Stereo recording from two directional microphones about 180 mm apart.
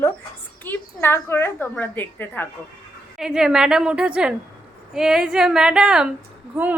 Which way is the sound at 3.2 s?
5° right (ahead or behind).